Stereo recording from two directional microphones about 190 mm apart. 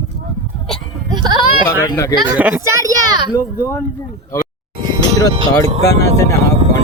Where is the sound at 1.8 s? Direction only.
15° left (ahead or behind).